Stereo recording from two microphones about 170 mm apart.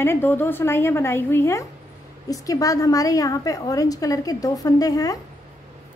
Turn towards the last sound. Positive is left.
turn(degrees=20)  # may be behind; listen again after turning